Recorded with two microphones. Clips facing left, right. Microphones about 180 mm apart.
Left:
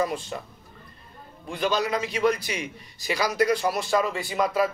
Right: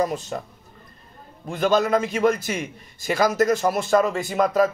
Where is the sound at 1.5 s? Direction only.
50° right (ahead or behind).